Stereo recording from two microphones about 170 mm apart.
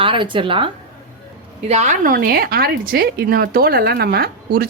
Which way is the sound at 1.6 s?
40° right (ahead or behind).